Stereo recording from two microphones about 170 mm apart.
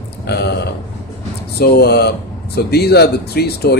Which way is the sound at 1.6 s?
70° left (ahead or behind).